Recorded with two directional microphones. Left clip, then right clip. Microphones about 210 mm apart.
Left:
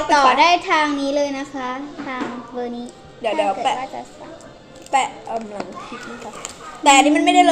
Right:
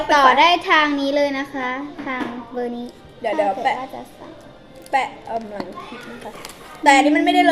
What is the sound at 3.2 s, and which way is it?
Speech, 10° left (ahead or behind).